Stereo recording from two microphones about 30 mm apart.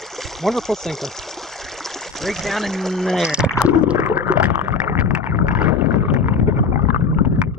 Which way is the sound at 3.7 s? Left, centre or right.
Right.